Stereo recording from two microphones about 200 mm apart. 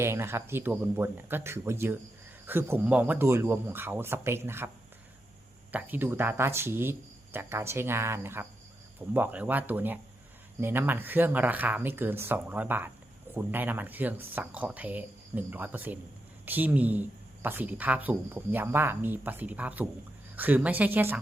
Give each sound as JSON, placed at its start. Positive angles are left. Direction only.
{"t": 0.0, "sound": "speech", "side_deg": -10}
{"t": 5.7, "sound": "speech", "side_deg": -10}